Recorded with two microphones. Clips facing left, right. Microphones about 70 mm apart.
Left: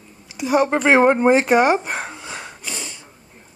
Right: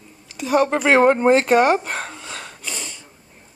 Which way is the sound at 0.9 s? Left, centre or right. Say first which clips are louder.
Even; centre.